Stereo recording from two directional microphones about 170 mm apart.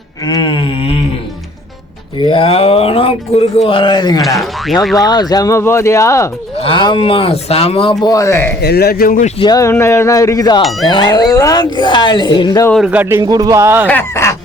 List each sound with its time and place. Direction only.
0.3 s a sound: 25° left (ahead or behind)
2.1 s speech: 30° left (ahead or behind)
4.4 s speech: centre (ahead or behind)
4.9 s speech: 25° left (ahead or behind)
6.6 s speech: 30° left (ahead or behind)
8.6 s speech: 70° left (ahead or behind)
9.4 s speech: 20° left (ahead or behind)
10.6 s speech: centre (ahead or behind)
10.8 s speech: 25° left (ahead or behind)
12.7 s speech: 5° right (ahead or behind)
13.8 s fowl: 15° left (ahead or behind)